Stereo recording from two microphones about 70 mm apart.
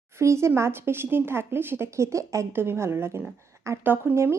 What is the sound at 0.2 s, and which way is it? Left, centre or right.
Speech, right.